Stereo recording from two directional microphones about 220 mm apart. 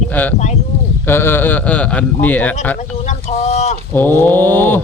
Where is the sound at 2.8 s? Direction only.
35° left (ahead or behind).